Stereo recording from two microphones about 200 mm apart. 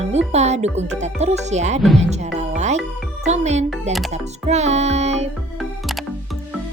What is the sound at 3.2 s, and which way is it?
A woman's voice, 35° right (ahead or behind).